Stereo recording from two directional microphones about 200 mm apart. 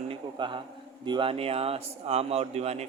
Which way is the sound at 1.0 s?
25° right (ahead or behind).